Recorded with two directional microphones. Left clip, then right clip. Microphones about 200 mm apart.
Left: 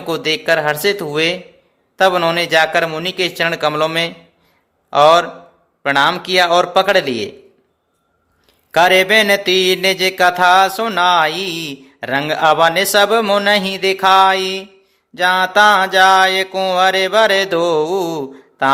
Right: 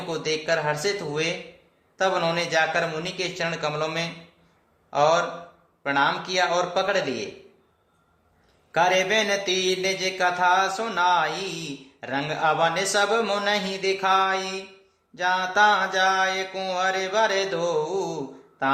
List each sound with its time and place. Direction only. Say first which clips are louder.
0.1 s mantra: left 10 dB; 45° left (ahead or behind)
8.7 s mantra: left 10 dB; 45° left (ahead or behind)